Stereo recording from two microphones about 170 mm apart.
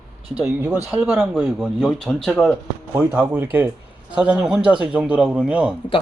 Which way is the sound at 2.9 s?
10° right (ahead or behind).